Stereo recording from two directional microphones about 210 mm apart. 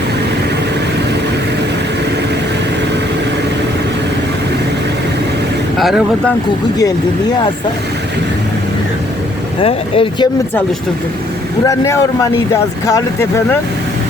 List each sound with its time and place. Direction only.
5.7 s speech: centre (ahead or behind)
9.6 s speech: 25° left (ahead or behind)
11.6 s speech: 15° left (ahead or behind)